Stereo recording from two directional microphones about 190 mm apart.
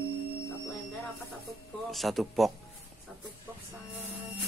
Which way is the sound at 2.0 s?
Centre (ahead or behind).